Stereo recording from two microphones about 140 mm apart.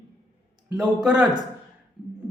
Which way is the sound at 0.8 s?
5° right (ahead or behind).